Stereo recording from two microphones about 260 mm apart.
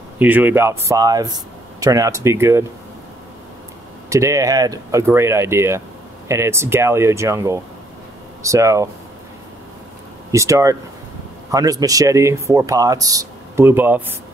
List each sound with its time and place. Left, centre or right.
0.2 s speech: centre
4.1 s speech: centre
10.3 s speech: centre